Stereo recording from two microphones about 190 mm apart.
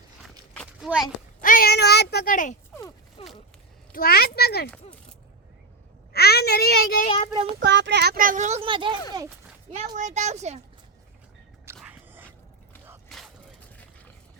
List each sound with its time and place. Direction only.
0.5 s a sound: 5° left (ahead or behind)
0.9 s a child's voice: centre (ahead or behind)
1.4 s a child's voice: 50° left (ahead or behind)
3.2 s a sound: 30° left (ahead or behind)
3.9 s a child's voice: 50° left (ahead or behind)
6.1 s a child's voice: 55° left (ahead or behind)
7.6 s speech: 65° right (ahead or behind); by 9.0 s 25° right (ahead or behind)
9.7 s speech: 40° right (ahead or behind)
11.8 s biting: 10° right (ahead or behind)
13.1 s a sound: centre (ahead or behind)